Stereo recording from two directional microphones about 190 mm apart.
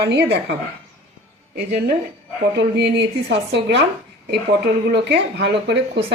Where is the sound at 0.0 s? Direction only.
60° right (ahead or behind).